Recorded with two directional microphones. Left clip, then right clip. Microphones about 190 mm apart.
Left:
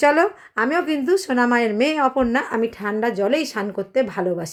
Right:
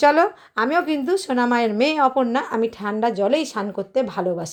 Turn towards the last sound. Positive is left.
turn(degrees=10)  # may be behind; listen again after turning